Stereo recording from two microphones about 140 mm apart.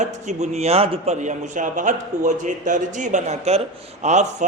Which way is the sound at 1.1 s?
60° right (ahead or behind).